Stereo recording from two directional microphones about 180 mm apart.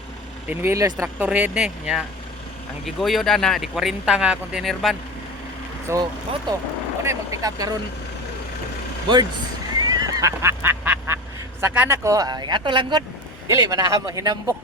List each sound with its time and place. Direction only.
0.6 s speech: 15° right (ahead or behind); by 4.9 s centre (ahead or behind)
5.9 s speech: 15° right (ahead or behind)
9.7 s duck: 20° right (ahead or behind)
11.6 s speech: 10° right (ahead or behind)